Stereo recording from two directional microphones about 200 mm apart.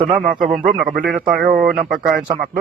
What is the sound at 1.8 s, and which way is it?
Speech, 45° right (ahead or behind).